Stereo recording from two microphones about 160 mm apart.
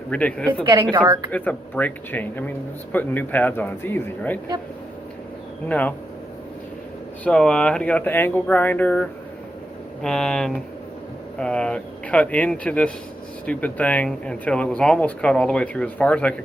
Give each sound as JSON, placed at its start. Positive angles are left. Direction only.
{"t": 0.1, "sound": "speech", "side_deg": 5}
{"t": 0.6, "sound": "a woman's voice", "side_deg": -20}
{"t": 1.3, "sound": "speech", "side_deg": 10}
{"t": 5.6, "sound": "speech", "side_deg": 10}
{"t": 7.3, "sound": "speech", "side_deg": 5}